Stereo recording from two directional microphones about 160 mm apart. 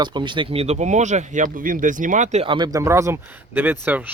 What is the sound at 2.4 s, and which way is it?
Speech, 30° right (ahead or behind).